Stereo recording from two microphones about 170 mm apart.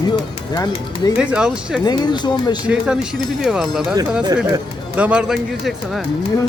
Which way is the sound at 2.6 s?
5° right (ahead or behind).